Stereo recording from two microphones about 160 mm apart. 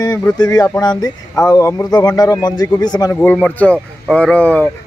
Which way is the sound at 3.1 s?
5° left (ahead or behind).